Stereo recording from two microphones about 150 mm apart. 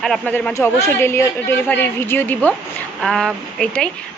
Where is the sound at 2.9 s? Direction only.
Centre (ahead or behind).